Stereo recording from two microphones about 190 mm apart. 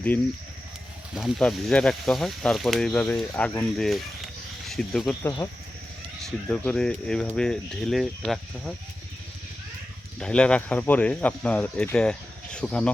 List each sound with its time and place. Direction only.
1.1 s speech: centre (ahead or behind)
10.2 s speech: 5° left (ahead or behind)